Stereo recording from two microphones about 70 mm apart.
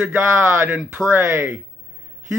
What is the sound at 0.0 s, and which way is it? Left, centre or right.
Speech, right.